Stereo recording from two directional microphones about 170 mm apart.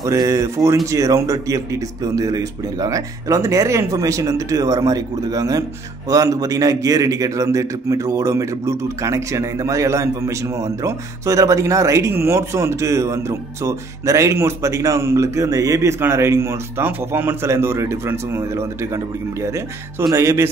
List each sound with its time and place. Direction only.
0.0 s speech: 20° right (ahead or behind)